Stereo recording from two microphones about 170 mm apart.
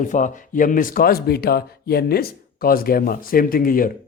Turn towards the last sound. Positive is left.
turn(degrees=55)  # may be behind; listen again after turning